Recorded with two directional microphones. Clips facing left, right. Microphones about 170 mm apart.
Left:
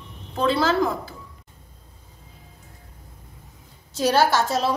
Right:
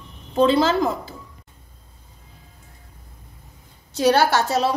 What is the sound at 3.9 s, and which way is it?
Speech, 65° right (ahead or behind).